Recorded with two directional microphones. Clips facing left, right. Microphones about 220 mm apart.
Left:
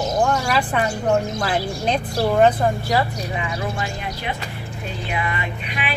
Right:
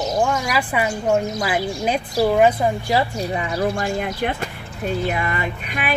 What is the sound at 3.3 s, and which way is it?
Speech, 40° right (ahead or behind).